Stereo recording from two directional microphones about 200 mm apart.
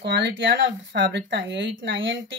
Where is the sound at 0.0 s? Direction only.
60° right (ahead or behind).